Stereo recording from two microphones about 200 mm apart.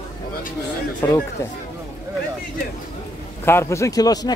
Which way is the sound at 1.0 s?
15° left (ahead or behind).